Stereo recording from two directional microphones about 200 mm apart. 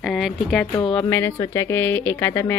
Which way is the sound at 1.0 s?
15° left (ahead or behind).